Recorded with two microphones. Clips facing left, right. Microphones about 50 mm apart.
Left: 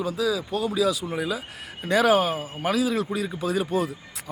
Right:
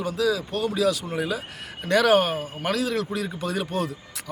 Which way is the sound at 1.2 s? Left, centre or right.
Right.